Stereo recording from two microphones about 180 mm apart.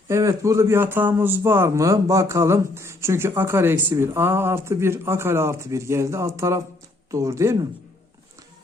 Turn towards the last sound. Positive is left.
turn(degrees=-15)  # may be behind; listen again after turning